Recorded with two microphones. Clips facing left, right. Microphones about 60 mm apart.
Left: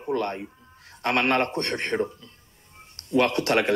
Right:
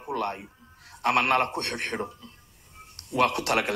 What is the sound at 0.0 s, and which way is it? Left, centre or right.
Speech, centre.